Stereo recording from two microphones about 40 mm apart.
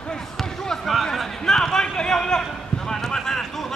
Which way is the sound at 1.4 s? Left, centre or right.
Centre.